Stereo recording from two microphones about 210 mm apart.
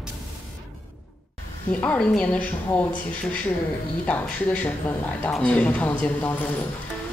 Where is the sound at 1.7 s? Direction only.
5° left (ahead or behind).